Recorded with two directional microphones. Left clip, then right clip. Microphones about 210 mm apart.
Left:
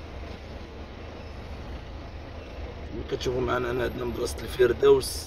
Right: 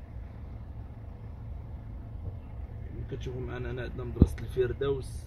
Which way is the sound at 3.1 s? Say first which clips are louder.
Left 13 dB; 20° left (ahead or behind).